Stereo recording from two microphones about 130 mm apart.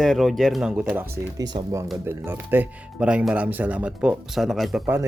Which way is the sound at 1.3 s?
25° right (ahead or behind).